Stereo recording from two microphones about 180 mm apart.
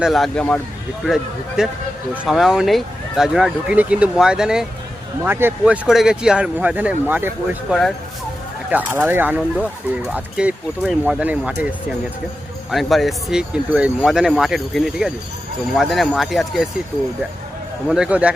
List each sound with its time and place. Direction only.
0.0 s speech: centre (ahead or behind)
7.7 s speech: centre (ahead or behind)
8.7 s speech: 10° right (ahead or behind)
12.7 s speech: centre (ahead or behind)
17.8 s speech: 5° right (ahead or behind)